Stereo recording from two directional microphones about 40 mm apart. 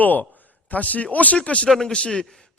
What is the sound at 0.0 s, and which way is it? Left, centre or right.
A man's voice, left.